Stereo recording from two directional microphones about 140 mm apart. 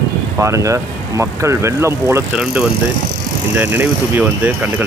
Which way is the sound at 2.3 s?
5° right (ahead or behind).